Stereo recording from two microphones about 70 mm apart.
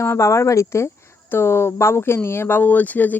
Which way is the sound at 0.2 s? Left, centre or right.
Left.